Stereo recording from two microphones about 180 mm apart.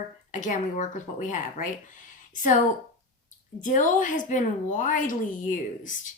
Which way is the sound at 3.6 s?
45° left (ahead or behind).